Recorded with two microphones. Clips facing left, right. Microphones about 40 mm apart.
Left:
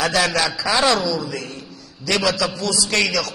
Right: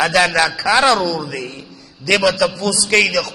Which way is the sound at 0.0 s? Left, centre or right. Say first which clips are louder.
Right 5 dB; right.